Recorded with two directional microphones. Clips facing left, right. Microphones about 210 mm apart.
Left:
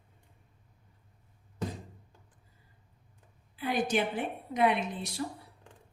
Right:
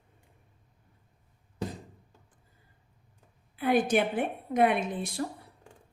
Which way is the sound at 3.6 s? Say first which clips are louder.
Right 5 dB; 55° right (ahead or behind).